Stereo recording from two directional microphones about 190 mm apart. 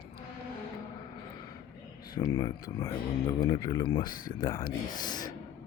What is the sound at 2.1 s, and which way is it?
Speech, 20° left (ahead or behind).